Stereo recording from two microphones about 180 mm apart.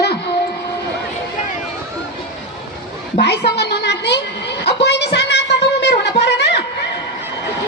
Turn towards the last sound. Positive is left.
turn(degrees=75)  # may be behind; listen again after turning